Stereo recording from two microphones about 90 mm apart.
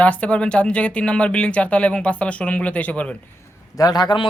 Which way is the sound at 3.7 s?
45° left (ahead or behind).